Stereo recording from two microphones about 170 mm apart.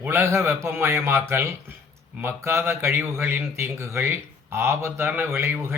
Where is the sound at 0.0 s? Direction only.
15° right (ahead or behind).